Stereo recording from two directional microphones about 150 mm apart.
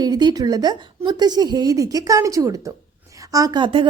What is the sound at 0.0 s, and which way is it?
A woman's voice, 30° right (ahead or behind).